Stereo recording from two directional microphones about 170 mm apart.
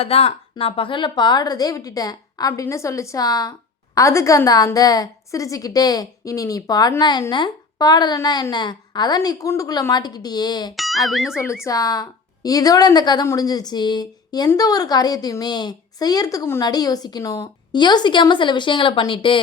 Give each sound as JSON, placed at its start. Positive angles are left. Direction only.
{"t": 0.0, "sound": "a woman's voice", "side_deg": 35}
{"t": 10.8, "sound": "speech", "side_deg": 0}
{"t": 11.6, "sound": "a woman's voice", "side_deg": 20}